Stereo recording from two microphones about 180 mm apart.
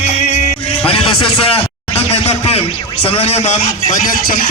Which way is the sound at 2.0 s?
35° left (ahead or behind).